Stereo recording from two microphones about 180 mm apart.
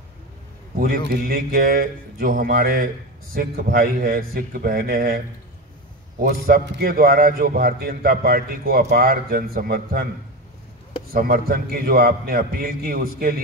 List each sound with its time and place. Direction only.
0.7 s a man's voice: 55° right (ahead or behind)
6.2 s a man's voice: 55° right (ahead or behind)
11.1 s a man's voice: 55° right (ahead or behind)